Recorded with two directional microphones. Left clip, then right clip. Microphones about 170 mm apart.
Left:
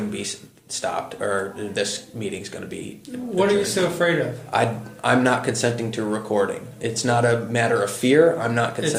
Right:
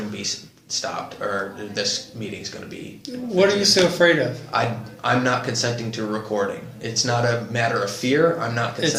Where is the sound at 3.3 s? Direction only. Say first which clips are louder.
Right 3 dB; 40° right (ahead or behind).